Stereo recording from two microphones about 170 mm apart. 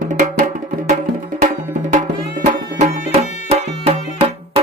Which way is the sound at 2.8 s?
35° right (ahead or behind).